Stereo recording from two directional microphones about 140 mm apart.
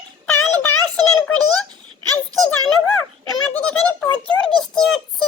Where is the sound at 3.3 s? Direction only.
10° left (ahead or behind).